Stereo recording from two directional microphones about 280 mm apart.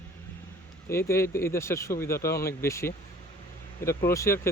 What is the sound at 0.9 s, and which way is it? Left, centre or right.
Speech, centre.